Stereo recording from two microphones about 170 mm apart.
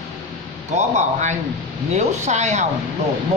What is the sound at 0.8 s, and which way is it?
A man's voice, 45° right (ahead or behind).